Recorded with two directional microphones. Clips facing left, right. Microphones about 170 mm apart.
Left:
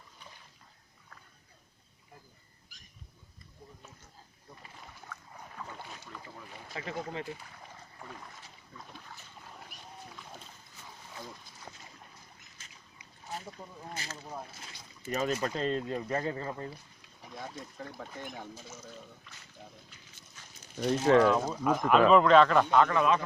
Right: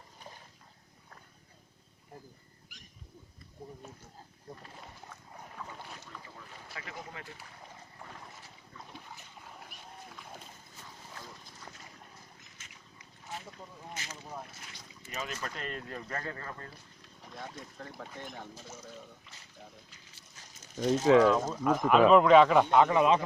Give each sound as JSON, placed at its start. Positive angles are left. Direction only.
{"t": 6.7, "sound": "speech", "side_deg": 25}
{"t": 9.0, "sound": "dog", "side_deg": -5}
{"t": 12.6, "sound": "a sound", "side_deg": 35}
{"t": 14.0, "sound": "speech", "side_deg": 35}
{"t": 17.2, "sound": "speech", "side_deg": 5}
{"t": 20.7, "sound": "speech", "side_deg": 5}